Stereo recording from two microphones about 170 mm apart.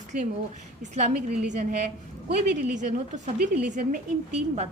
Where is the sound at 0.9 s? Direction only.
40° right (ahead or behind).